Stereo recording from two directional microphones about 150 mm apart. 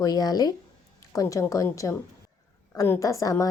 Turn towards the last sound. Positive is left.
turn(degrees=20)  # may be behind; listen again after turning